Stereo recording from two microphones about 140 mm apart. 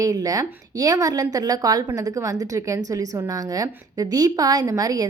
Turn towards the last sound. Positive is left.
turn(degrees=-25)  # may be behind; listen again after turning